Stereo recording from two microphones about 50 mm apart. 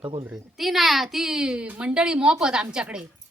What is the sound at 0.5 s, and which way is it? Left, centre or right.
A woman's voice, centre.